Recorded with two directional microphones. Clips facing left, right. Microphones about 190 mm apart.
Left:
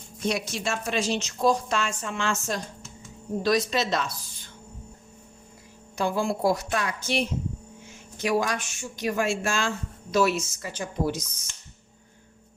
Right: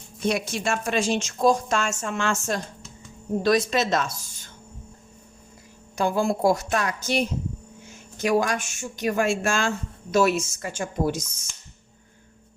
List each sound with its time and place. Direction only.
0.3 s speech: 55° right (ahead or behind)
6.0 s speech: 45° right (ahead or behind)